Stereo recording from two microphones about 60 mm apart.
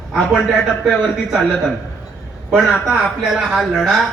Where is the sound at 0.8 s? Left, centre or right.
Centre.